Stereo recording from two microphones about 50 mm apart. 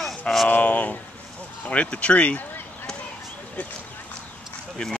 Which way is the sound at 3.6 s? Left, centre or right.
Left.